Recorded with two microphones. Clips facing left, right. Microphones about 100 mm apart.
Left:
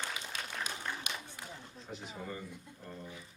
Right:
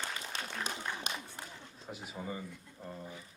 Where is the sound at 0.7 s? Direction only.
30° right (ahead or behind).